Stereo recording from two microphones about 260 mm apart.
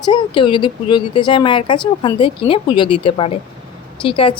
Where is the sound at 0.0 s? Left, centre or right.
Centre.